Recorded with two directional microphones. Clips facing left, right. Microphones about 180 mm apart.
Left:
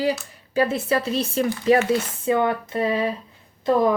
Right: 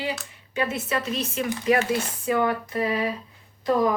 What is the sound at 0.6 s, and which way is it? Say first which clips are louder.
A woman's voice: left 6 dB; 35° left (ahead or behind).